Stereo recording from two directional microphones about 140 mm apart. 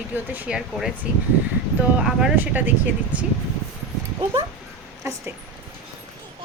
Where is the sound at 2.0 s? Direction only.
10° right (ahead or behind).